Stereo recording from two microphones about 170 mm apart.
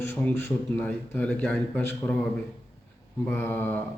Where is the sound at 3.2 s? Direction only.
10° left (ahead or behind).